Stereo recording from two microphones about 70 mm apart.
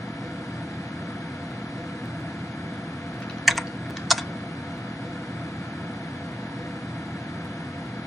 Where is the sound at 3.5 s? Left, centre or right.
Centre.